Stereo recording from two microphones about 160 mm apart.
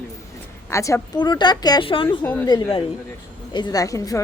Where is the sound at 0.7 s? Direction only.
20° left (ahead or behind); by 2.0 s 35° left (ahead or behind).